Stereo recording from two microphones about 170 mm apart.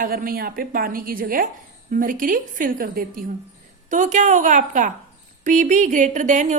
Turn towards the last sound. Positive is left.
turn(degrees=-45)  # may be behind; listen again after turning